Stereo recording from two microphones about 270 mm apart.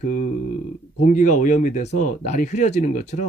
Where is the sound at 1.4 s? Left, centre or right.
Left.